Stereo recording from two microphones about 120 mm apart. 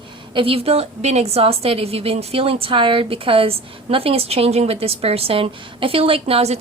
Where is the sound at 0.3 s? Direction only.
50° right (ahead or behind).